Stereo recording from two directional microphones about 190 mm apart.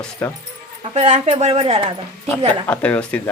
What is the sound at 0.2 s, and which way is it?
Speech, 5° left (ahead or behind).